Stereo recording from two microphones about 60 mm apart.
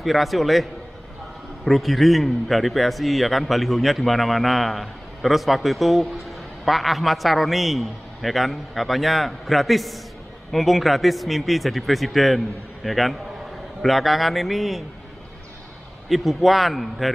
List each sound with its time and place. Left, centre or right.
0.0 s a man's voice: centre
16.1 s a man's voice: centre